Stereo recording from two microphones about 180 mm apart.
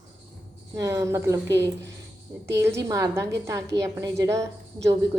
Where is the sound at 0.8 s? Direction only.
15° right (ahead or behind).